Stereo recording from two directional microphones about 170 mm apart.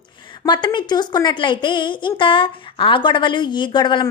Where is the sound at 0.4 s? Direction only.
25° left (ahead or behind).